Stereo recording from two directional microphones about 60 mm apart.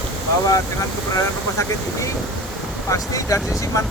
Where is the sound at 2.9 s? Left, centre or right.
Left.